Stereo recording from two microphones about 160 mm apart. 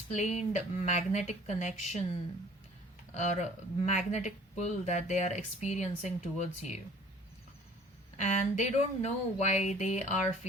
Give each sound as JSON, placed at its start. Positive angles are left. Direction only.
{"t": 0.1, "sound": "speech", "side_deg": 45}
{"t": 3.2, "sound": "speech", "side_deg": 45}
{"t": 8.1, "sound": "speech", "side_deg": 45}